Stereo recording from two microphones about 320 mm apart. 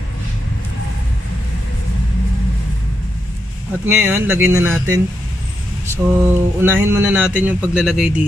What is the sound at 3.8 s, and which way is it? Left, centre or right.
Speech, centre.